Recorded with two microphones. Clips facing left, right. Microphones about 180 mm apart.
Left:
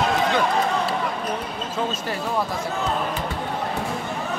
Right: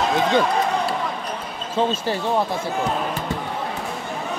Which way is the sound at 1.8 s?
30° right (ahead or behind).